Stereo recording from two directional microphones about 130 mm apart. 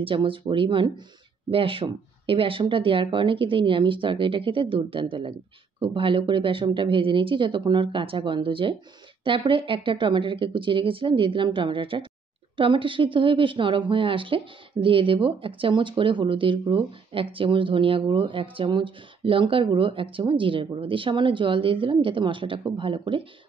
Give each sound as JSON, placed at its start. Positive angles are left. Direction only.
{"t": 0.0, "sound": "a woman's voice", "side_deg": -40}